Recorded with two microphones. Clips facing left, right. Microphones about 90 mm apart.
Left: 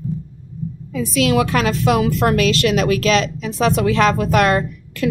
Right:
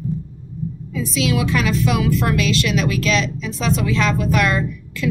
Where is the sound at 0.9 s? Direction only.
55° left (ahead or behind); by 2.4 s 40° left (ahead or behind).